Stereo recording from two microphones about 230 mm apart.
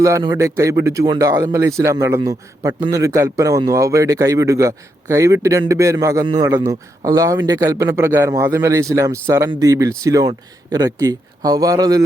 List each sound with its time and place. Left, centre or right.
0.0 s a man's voice: centre